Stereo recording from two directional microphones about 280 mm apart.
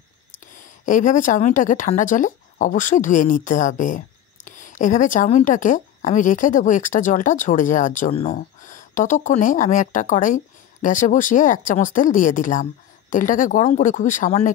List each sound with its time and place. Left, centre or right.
0.6 s speech: left